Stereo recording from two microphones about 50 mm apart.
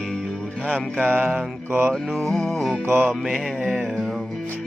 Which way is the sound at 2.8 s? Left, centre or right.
Right.